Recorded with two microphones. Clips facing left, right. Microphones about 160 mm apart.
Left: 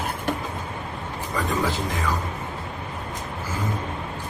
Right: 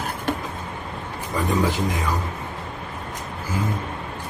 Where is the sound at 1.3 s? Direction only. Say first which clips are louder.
Right 3 dB; 15° right (ahead or behind).